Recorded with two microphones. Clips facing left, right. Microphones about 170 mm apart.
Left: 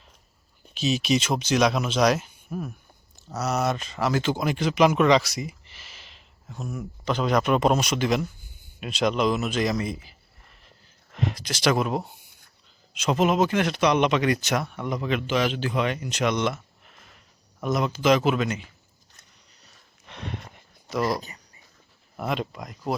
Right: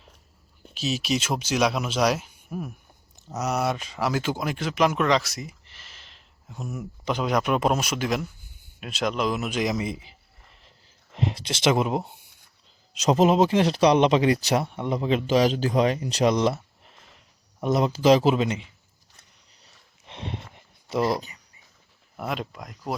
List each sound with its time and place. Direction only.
0.7 s speech: 5° right (ahead or behind)
6.6 s speech: 15° right (ahead or behind)
12.9 s speech: 35° right (ahead or behind)
19.6 s sniff: 25° right (ahead or behind)
20.9 s speech: 25° right (ahead or behind)
22.2 s speech: centre (ahead or behind)